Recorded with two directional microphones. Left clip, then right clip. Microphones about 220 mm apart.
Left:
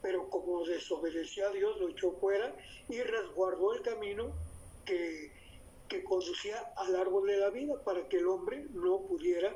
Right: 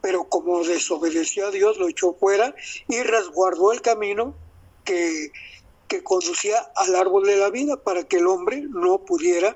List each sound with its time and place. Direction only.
0.3 s a man's voice: 50° right (ahead or behind)